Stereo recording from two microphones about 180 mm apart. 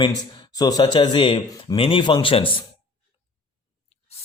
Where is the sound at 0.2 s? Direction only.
20° left (ahead or behind).